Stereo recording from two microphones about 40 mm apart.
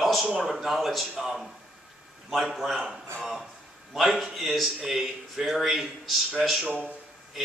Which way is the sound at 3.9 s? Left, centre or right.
Centre.